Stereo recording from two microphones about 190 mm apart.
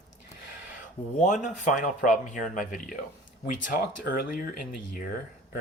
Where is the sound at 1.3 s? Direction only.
40° left (ahead or behind).